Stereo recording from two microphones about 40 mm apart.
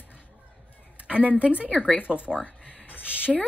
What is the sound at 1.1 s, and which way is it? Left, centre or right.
Speech, right.